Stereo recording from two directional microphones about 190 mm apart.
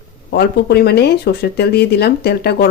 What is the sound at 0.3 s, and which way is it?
Speech, 60° left (ahead or behind).